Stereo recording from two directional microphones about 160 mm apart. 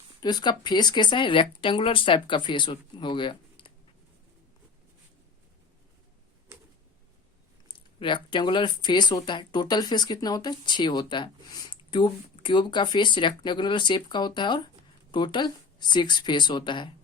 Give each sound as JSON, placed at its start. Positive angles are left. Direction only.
{"t": 0.2, "sound": "speech", "side_deg": 25}
{"t": 7.7, "sound": "speech", "side_deg": 30}